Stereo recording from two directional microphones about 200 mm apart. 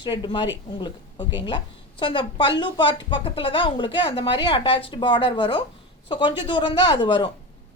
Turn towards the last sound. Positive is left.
turn(degrees=25)  # may be behind; listen again after turning